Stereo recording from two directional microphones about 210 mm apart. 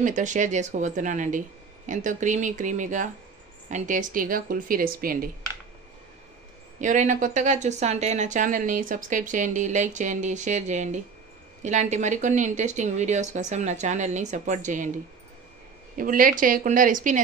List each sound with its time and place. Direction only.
0.0 s a woman's voice: 35° right (ahead or behind)
6.8 s a woman's voice: 35° right (ahead or behind)
16.0 s a woman's voice: 40° right (ahead or behind)